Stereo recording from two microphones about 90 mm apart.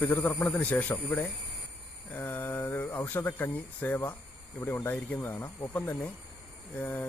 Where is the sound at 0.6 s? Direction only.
15° left (ahead or behind).